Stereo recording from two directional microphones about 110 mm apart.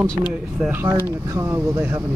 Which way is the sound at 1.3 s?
25° right (ahead or behind).